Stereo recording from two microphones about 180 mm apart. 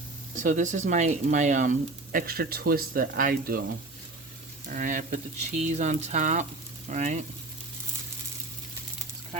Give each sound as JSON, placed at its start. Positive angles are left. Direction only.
{"t": 0.3, "sound": "speech", "side_deg": -45}
{"t": 2.1, "sound": "speech", "side_deg": -55}
{"t": 4.7, "sound": "speech", "side_deg": -50}